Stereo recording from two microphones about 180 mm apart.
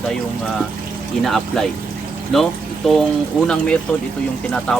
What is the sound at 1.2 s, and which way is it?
Speech, centre (ahead or behind).